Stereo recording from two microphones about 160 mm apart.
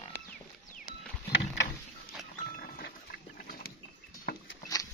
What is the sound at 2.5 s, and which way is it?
Music, 70° left (ahead or behind).